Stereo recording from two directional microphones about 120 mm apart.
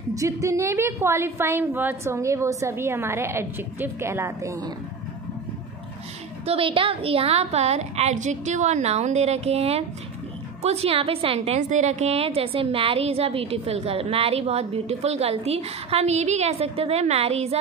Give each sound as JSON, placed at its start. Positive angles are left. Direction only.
{"t": 0.1, "sound": "a woman's voice", "side_deg": -25}
{"t": 6.4, "sound": "a woman's voice", "side_deg": -50}